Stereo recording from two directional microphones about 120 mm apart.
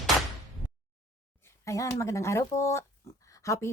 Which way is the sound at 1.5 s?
25° left (ahead or behind).